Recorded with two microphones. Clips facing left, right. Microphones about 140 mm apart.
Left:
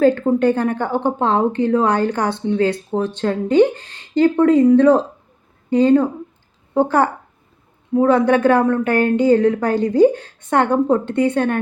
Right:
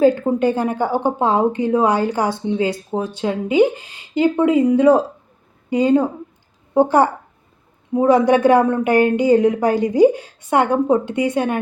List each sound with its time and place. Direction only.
0.0 s a woman's voice: 10° right (ahead or behind)